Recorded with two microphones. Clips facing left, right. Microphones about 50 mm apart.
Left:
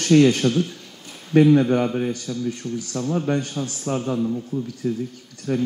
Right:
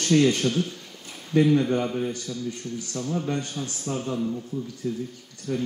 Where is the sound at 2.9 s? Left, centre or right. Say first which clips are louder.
Left 5 dB; left.